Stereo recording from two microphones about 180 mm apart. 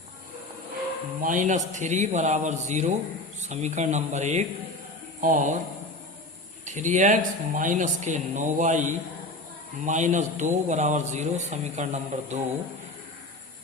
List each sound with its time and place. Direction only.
1.2 s a man's voice: 45° right (ahead or behind)
6.7 s a man's voice: 40° right (ahead or behind)